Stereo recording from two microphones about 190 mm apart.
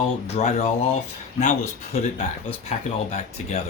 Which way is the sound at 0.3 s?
35° left (ahead or behind).